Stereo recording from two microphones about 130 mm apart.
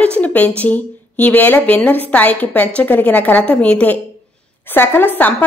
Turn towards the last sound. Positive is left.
turn(degrees=15)  # may be behind; listen again after turning